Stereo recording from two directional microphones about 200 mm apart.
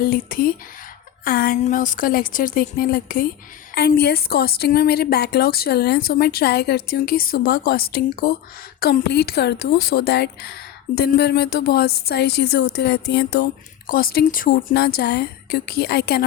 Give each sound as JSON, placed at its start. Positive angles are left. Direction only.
{"t": 0.0, "sound": "a woman's voice", "side_deg": 45}
{"t": 13.8, "sound": "a woman's voice", "side_deg": 45}